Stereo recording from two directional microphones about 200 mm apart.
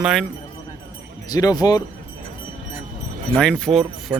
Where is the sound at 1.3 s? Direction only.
20° left (ahead or behind).